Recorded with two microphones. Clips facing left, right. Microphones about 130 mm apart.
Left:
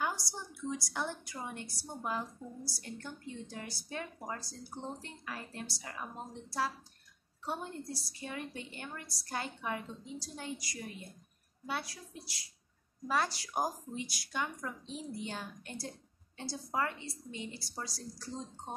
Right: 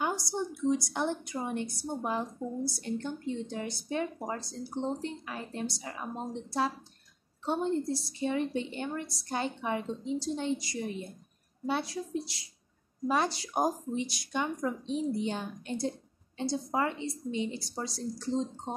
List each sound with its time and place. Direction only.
0.0 s a woman's voice: 20° right (ahead or behind)